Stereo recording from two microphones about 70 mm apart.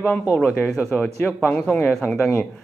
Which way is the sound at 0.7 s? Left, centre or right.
Centre.